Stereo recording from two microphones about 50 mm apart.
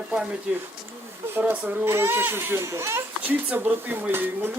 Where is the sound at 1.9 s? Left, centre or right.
Right.